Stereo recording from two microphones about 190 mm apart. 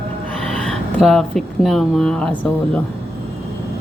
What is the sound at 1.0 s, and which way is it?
Speech, centre (ahead or behind).